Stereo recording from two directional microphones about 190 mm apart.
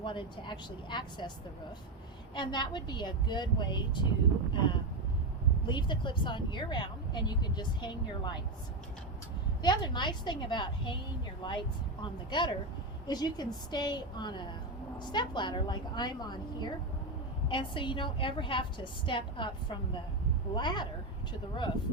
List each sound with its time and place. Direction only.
0.0 s speech: 25° left (ahead or behind)
2.3 s speech: 25° left (ahead or behind)
9.6 s speech: 25° left (ahead or behind)